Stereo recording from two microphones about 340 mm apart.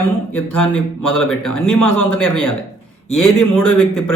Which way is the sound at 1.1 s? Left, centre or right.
Centre.